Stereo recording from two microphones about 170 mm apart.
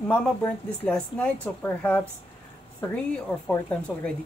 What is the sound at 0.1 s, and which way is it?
Speech, 10° left (ahead or behind).